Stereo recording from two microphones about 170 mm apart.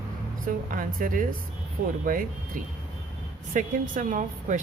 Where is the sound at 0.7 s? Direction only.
50° right (ahead or behind).